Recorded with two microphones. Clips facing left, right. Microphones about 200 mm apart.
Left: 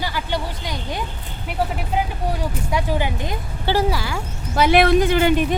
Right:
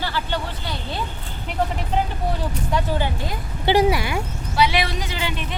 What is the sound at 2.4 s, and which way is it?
Speech, 10° left (ahead or behind).